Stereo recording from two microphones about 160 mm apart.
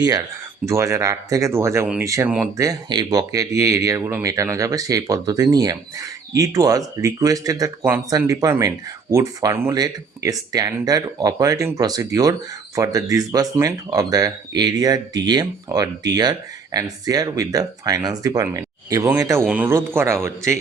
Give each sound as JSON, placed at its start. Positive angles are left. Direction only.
{"t": 0.0, "sound": "speech", "side_deg": -20}